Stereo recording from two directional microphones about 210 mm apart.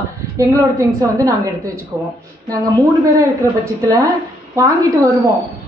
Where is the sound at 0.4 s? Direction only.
15° right (ahead or behind).